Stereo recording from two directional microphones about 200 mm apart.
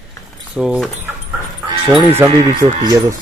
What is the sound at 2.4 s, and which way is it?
Speech, 20° right (ahead or behind).